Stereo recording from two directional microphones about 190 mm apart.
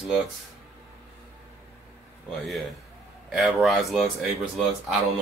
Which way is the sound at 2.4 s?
Centre (ahead or behind).